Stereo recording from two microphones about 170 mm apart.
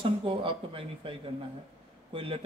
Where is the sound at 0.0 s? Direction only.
30° right (ahead or behind).